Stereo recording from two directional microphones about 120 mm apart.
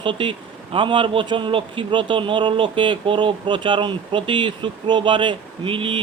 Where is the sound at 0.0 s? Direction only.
45° right (ahead or behind).